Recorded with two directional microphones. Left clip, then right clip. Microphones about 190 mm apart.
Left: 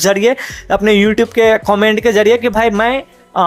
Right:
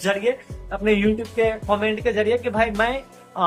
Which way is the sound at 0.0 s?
45° left (ahead or behind).